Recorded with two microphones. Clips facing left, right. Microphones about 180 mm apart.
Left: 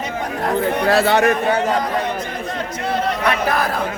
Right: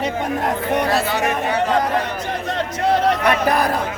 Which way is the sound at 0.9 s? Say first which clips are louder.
Left 5 dB; 70° left (ahead or behind).